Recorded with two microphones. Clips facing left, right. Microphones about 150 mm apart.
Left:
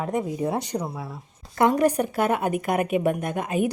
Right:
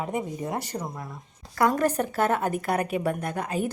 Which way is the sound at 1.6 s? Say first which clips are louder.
Left 3 dB; 20° left (ahead or behind).